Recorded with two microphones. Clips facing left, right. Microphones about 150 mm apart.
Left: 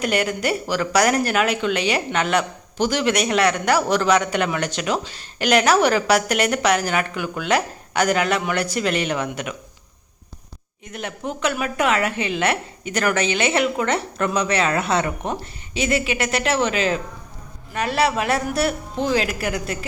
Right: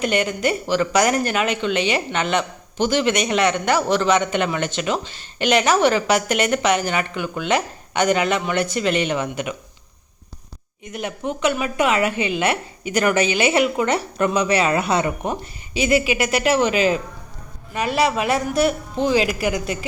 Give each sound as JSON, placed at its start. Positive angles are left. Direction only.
{"t": 0.0, "sound": "a man's voice", "side_deg": 5}
{"t": 10.9, "sound": "a man's voice", "side_deg": 0}